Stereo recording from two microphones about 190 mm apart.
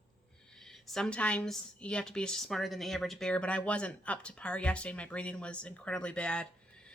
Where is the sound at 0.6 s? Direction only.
Centre (ahead or behind).